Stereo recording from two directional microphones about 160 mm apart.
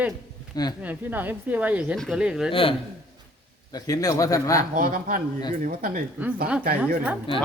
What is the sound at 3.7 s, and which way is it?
Speech, 25° left (ahead or behind).